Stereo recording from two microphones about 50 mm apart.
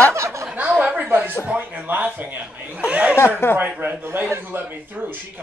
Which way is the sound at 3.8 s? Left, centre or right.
Right.